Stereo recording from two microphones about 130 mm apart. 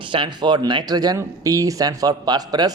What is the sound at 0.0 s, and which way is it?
A man's voice, 40° right (ahead or behind).